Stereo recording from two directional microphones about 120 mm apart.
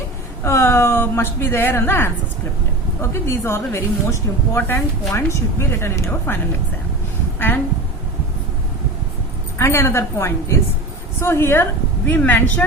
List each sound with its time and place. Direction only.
0.4 s a woman's voice: 25° left (ahead or behind)
9.6 s speech: 20° left (ahead or behind)